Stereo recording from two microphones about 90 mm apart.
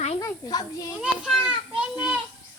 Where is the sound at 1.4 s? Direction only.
10° right (ahead or behind).